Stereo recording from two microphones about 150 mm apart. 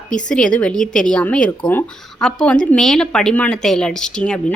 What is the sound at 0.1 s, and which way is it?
A woman's voice, 5° left (ahead or behind).